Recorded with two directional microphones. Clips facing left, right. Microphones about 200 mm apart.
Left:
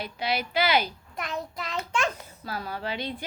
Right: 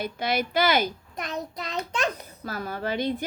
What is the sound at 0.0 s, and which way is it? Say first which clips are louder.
Speech: right 3 dB; 50° right (ahead or behind).